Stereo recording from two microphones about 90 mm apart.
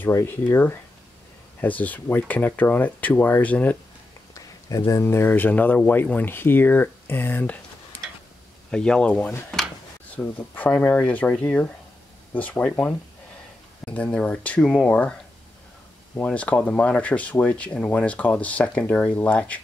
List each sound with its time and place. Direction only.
0.0 s speech: 30° left (ahead or behind)
4.3 s a sound: 40° left (ahead or behind)
5.0 s speech: 25° left (ahead or behind)
8.6 s speech: 10° left (ahead or behind)
16.2 s speech: 15° left (ahead or behind)